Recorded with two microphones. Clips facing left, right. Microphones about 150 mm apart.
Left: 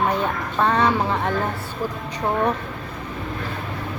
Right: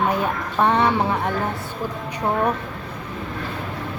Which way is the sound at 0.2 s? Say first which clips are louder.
Right 1 dB; 15° right (ahead or behind).